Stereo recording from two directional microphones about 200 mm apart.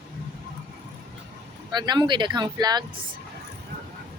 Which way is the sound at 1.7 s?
20° right (ahead or behind).